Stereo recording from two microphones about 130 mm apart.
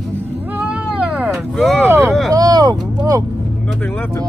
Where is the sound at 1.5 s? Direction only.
5° left (ahead or behind).